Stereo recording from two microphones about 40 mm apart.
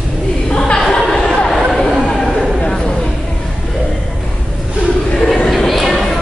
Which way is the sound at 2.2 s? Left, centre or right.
Centre.